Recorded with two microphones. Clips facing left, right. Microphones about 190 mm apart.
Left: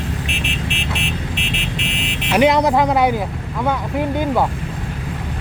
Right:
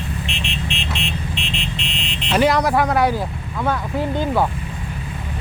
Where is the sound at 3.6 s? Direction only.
15° left (ahead or behind).